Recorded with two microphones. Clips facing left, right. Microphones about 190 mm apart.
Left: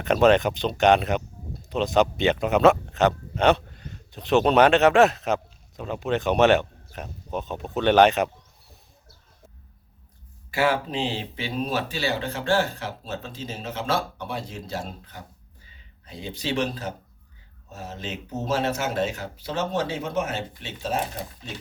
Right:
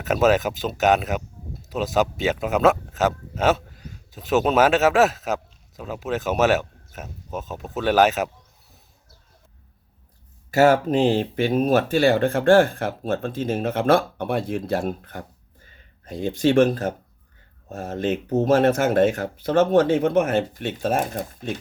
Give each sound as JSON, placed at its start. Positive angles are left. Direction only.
{"t": 0.0, "sound": "speech", "side_deg": -5}
{"t": 10.5, "sound": "speech", "side_deg": -45}